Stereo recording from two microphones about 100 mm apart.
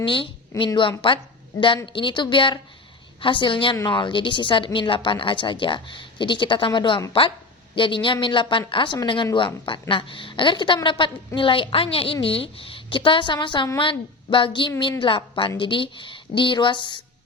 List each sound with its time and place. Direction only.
0.0 s a woman's voice: 55° left (ahead or behind)